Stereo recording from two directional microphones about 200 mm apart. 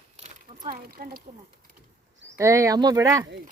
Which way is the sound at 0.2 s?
45° right (ahead or behind).